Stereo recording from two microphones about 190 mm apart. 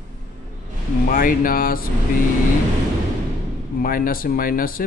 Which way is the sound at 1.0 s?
45° left (ahead or behind).